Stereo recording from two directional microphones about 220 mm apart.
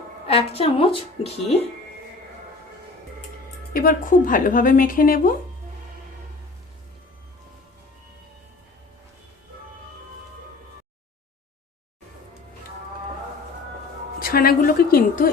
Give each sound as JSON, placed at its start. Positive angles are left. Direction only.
{"t": 0.3, "sound": "a woman's voice", "side_deg": 25}
{"t": 3.7, "sound": "a woman's voice", "side_deg": 40}
{"t": 14.2, "sound": "a woman's voice", "side_deg": 40}